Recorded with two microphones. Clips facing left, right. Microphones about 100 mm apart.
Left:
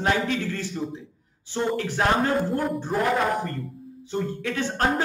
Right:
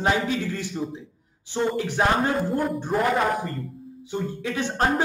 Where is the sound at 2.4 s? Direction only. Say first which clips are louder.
Right 1 dB; centre (ahead or behind).